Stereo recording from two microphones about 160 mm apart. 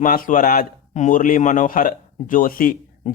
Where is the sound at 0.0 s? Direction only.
60° left (ahead or behind).